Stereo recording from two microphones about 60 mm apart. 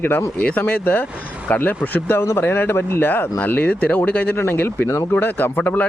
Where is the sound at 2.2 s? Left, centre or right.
Left.